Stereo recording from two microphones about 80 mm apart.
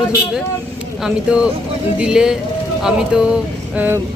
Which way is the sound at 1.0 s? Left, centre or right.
Centre.